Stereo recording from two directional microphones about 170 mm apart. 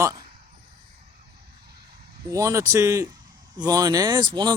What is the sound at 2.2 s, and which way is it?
Speech, 20° right (ahead or behind).